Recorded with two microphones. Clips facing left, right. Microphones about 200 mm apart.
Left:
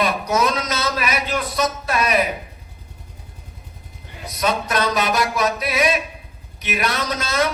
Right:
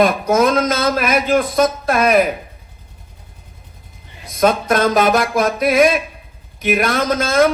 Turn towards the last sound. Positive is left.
turn(degrees=-50)  # may be behind; listen again after turning